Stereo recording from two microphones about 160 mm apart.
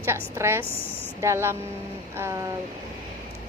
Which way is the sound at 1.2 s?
15° right (ahead or behind).